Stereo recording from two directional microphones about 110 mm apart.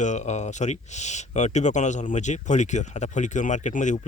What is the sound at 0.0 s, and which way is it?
Speech, 90° left.